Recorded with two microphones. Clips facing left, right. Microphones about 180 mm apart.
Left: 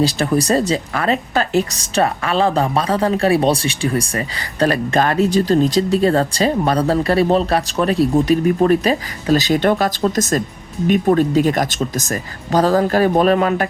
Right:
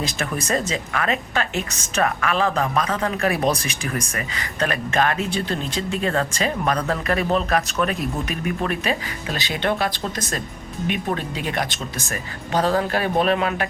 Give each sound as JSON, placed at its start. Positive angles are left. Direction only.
{"t": 0.0, "sound": "speech", "side_deg": 35}